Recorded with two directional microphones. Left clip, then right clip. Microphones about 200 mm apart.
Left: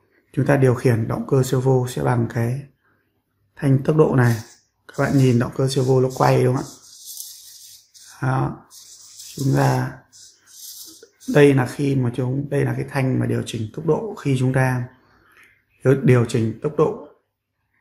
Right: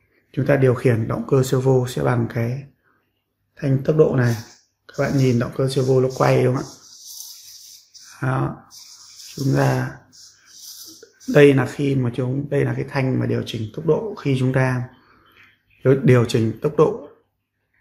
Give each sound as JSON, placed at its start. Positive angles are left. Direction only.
{"t": 0.3, "sound": "speech", "side_deg": 15}
{"t": 8.1, "sound": "speech", "side_deg": 5}
{"t": 11.3, "sound": "speech", "side_deg": 0}
{"t": 16.1, "sound": "speech", "side_deg": -5}